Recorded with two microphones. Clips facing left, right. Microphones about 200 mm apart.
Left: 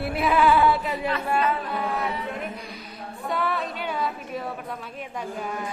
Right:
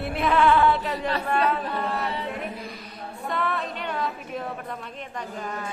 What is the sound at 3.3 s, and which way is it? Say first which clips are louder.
A woman's voice: left 1 dB; centre (ahead or behind).